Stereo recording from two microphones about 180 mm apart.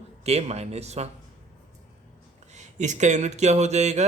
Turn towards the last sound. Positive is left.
turn(degrees=-40)  # may be behind; listen again after turning